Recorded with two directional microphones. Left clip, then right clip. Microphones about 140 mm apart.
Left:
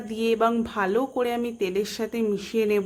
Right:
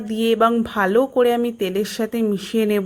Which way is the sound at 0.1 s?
35° right (ahead or behind).